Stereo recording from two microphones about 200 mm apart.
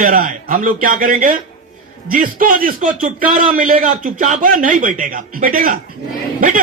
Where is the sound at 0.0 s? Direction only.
45° right (ahead or behind).